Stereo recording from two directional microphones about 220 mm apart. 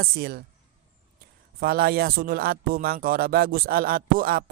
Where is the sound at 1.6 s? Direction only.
45° right (ahead or behind).